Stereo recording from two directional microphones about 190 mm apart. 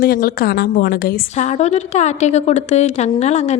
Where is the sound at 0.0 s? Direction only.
50° left (ahead or behind).